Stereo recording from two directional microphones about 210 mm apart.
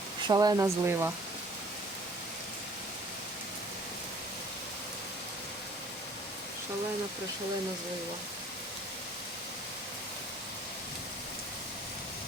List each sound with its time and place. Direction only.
0.3 s speech: 20° right (ahead or behind)